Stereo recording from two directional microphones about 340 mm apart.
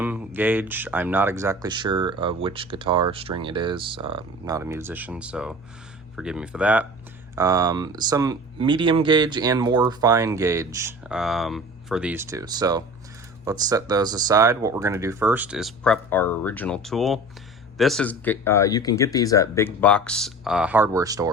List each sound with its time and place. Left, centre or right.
0.0 s speech: centre